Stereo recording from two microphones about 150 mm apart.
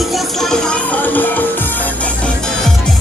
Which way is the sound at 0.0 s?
Centre (ahead or behind).